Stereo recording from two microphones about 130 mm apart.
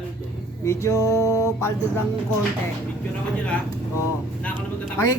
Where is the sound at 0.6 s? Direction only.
25° left (ahead or behind).